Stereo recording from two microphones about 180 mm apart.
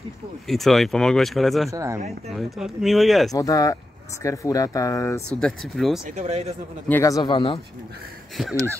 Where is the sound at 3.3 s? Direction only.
20° left (ahead or behind).